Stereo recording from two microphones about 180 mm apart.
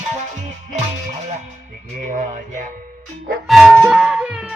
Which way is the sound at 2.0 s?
45° right (ahead or behind).